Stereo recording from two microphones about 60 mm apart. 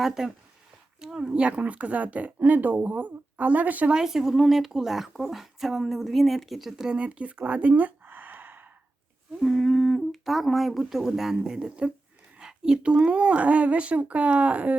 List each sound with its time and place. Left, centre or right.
0.0 s a woman's voice: centre; by 3.9 s right
3.9 s speech: centre
6.9 s a sound: centre
9.4 s a woman's voice: centre; by 14.8 s right